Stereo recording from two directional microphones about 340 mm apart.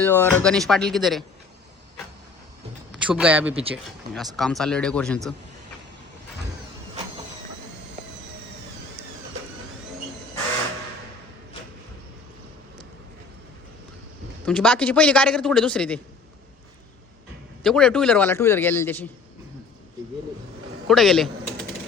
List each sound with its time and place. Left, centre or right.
0.0 s a man's voice: centre
2.9 s a man's voice: centre
3.5 s speech: centre
4.4 s a man's voice: centre
14.4 s a man's voice: centre
17.6 s a man's voice: centre
20.8 s typing: centre